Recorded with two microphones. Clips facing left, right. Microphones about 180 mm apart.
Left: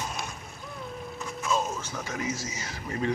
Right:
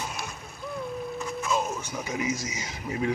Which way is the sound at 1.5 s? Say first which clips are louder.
Left 1 dB; 15° right (ahead or behind).